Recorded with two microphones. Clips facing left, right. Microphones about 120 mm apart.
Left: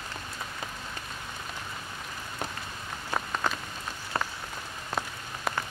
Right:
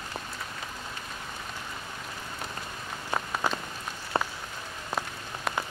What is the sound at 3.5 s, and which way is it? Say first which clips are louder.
Rain on surface: right 2 dB; 10° right (ahead or behind).